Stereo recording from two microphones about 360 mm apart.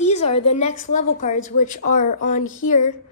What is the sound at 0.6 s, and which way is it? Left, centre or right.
A woman's voice, centre.